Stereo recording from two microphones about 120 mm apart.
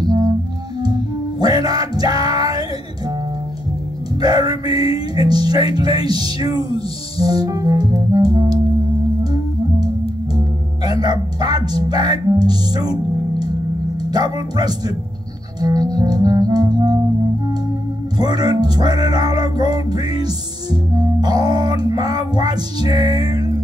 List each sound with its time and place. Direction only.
0.0 s music: 30° right (ahead or behind)
1.4 s music: 30° right (ahead or behind)
4.2 s music: 35° right (ahead or behind)
4.9 s speech: 35° right (ahead or behind)
9.2 s music: 35° right (ahead or behind)
10.3 s speech: 35° right (ahead or behind)
18.1 s speech: 35° right (ahead or behind)
23.0 s music: 55° left (ahead or behind)
23.3 s music: 30° right (ahead or behind)